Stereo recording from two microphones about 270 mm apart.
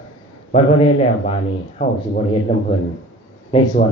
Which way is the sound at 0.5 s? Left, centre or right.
Left.